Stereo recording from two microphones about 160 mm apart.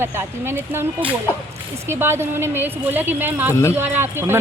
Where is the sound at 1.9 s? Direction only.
15° right (ahead or behind).